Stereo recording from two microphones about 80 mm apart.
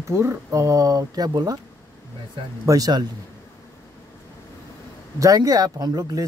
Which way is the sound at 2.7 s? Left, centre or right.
Right.